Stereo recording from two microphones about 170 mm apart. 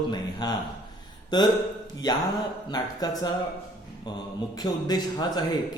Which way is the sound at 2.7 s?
25° left (ahead or behind).